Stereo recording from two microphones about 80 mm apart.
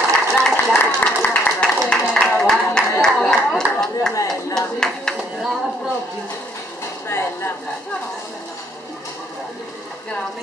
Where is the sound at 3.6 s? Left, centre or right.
Right.